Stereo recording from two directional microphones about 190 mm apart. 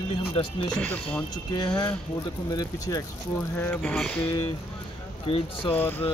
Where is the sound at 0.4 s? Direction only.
30° left (ahead or behind).